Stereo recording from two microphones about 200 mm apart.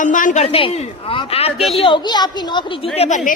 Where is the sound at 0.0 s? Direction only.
40° left (ahead or behind).